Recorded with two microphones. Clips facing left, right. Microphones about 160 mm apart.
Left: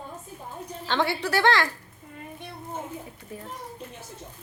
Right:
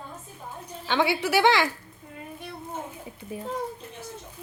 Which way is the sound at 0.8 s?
5° right (ahead or behind).